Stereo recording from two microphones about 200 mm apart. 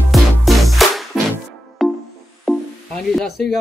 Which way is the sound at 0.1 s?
Centre (ahead or behind).